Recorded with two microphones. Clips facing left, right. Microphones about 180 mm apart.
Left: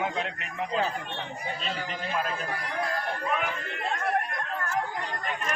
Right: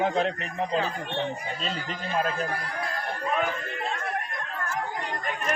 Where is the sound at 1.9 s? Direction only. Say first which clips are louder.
Right 4 dB; 40° right (ahead or behind).